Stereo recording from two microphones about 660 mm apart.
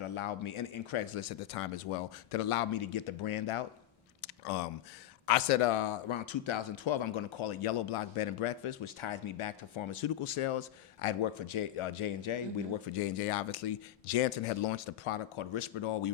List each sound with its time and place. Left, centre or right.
0.2 s speech: left
4.2 s a sound: left
5.2 s speech: left